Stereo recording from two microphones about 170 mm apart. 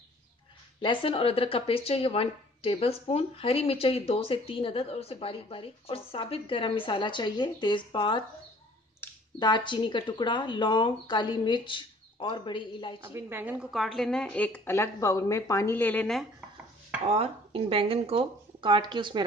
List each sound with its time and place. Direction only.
0.7 s speech: 30° left (ahead or behind)
9.0 s clicking: 15° left (ahead or behind)
9.4 s speech: 25° left (ahead or behind)
13.0 s a woman's voice: 15° right (ahead or behind); by 16.3 s 5° left (ahead or behind)
17.0 s speech: 35° right (ahead or behind)